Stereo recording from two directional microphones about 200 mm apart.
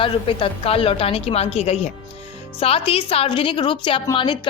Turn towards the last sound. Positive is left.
turn(degrees=25)  # may be behind; listen again after turning